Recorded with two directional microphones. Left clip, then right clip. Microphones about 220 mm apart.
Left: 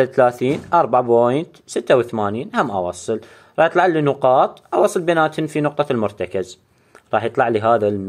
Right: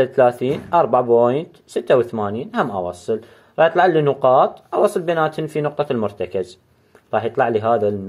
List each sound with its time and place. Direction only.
0.0 s speech: 30° left (ahead or behind)